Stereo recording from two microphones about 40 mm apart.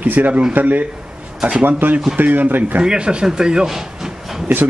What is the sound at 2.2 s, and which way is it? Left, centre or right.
Speech, right.